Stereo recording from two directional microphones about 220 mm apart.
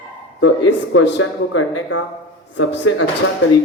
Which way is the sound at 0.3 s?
70° left (ahead or behind).